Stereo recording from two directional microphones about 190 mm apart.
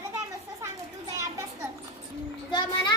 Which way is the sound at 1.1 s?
15° right (ahead or behind).